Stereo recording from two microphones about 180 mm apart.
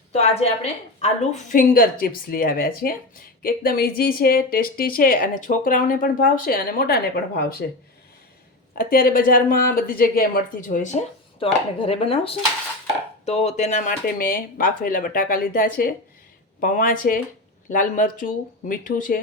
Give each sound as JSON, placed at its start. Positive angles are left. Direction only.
{"t": 0.1, "sound": "a woman's voice", "side_deg": 35}
{"t": 8.7, "sound": "a woman's voice", "side_deg": 55}
{"t": 11.4, "sound": "a woman's voice", "side_deg": 30}